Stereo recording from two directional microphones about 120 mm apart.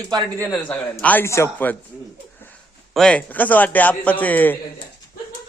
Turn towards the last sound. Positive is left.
turn(degrees=15)  # may be behind; listen again after turning